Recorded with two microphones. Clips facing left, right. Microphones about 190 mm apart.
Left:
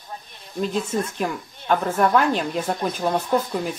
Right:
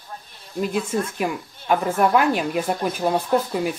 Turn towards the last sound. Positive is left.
turn(degrees=-5)  # may be behind; listen again after turning